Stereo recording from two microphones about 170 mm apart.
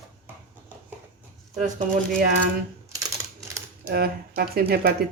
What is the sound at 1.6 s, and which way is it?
Speech, 50° right (ahead or behind).